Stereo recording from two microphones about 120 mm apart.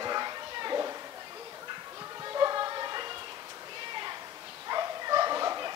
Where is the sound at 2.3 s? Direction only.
30° right (ahead or behind).